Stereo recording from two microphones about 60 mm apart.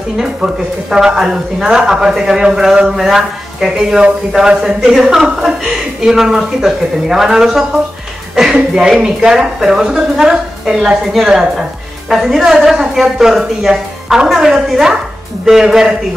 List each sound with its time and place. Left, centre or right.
0.2 s speech: centre
3.7 s speech: centre